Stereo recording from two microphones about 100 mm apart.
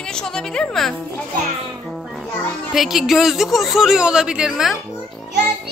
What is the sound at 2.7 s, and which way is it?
A woman's voice, centre (ahead or behind).